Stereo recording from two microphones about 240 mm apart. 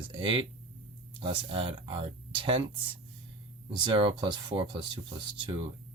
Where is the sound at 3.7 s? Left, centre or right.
Centre.